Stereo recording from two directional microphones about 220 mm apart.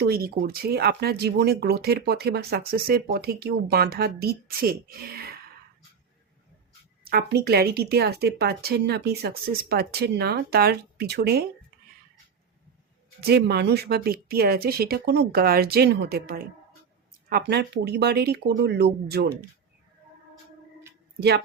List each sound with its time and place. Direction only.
0.0 s speech: 45° right (ahead or behind)
7.0 s speech: 45° right (ahead or behind)
13.2 s speech: 50° right (ahead or behind)
21.2 s speech: 50° right (ahead or behind)